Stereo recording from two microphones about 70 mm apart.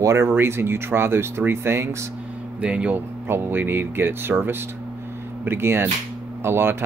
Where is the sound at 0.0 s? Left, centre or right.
Right.